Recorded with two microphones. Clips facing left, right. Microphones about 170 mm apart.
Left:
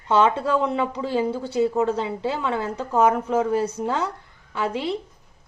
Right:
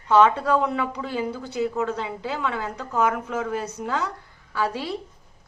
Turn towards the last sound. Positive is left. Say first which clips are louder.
# left 2 dB
turn(degrees=20)  # may be behind; listen again after turning